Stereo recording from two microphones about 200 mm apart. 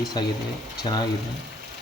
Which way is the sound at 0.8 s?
20° left (ahead or behind).